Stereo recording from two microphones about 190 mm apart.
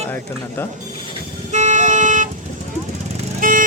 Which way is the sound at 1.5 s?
40° right (ahead or behind).